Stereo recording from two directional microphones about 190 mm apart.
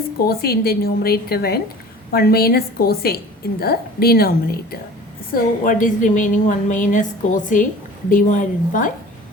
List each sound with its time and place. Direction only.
0.3 s a woman's voice: 55° left (ahead or behind)
5.3 s a woman's voice: 45° left (ahead or behind)